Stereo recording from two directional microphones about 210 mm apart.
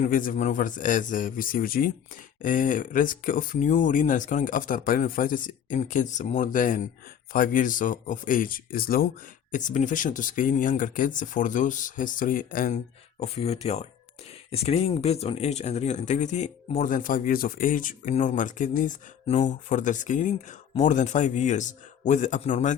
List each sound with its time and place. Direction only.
0.0 s speech: 40° left (ahead or behind)
13.2 s speech: 30° left (ahead or behind)